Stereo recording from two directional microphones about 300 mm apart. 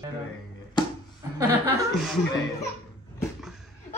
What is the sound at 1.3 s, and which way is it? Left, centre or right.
Speech, centre.